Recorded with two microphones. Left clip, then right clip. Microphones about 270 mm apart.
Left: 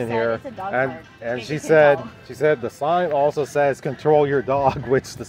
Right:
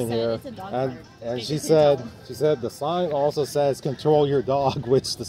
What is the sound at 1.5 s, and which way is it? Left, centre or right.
Speech, centre.